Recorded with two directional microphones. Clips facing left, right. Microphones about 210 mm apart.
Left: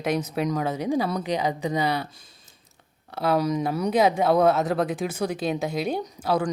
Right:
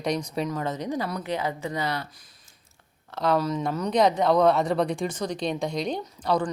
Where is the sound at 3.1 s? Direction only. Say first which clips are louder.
Left 1 dB; 10° left (ahead or behind).